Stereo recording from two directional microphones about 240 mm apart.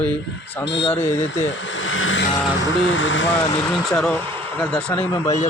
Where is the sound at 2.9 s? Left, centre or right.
Left.